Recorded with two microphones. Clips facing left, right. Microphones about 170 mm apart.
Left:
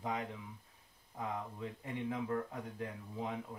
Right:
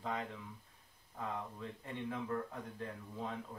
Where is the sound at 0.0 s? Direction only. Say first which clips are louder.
Left 1 dB; 15° left (ahead or behind).